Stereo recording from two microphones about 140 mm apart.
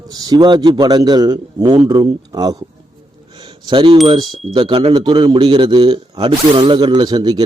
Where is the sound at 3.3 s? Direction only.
35° right (ahead or behind).